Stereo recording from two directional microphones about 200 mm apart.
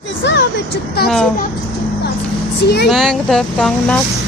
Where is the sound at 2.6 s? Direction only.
55° left (ahead or behind).